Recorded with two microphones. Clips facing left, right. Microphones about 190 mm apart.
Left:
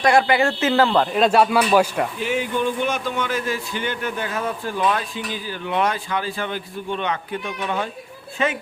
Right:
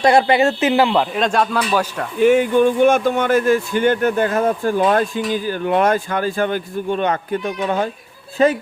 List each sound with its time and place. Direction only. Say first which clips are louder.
0.0 s speech: right 4 dB; 25° right (ahead or behind); by 2.0 s 10° left (ahead or behind)
2.2 s speech: right 13 dB; 50° right (ahead or behind)